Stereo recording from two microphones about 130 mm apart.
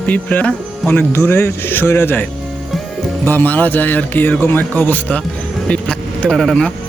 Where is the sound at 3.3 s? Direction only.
15° left (ahead or behind).